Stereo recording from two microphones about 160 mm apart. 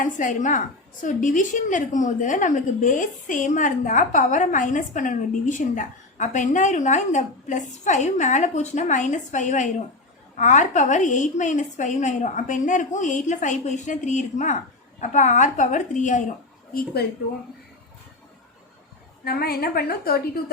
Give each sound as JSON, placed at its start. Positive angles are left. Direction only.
{"t": 0.0, "sound": "a woman's voice", "side_deg": 55}
{"t": 16.7, "sound": "a woman's voice", "side_deg": 80}
{"t": 19.2, "sound": "a woman's voice", "side_deg": 80}